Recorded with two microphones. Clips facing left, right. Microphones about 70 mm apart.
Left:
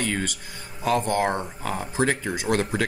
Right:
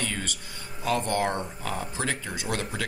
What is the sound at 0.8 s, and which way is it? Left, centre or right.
Speech, centre.